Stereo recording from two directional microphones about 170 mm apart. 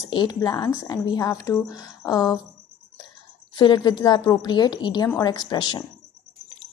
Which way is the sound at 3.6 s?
25° left (ahead or behind).